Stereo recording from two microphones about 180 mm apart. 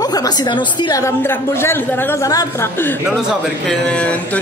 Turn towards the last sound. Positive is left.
turn(degrees=5)  # may be behind; listen again after turning